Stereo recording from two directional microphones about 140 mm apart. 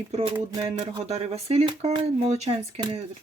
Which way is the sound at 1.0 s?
45° right (ahead or behind).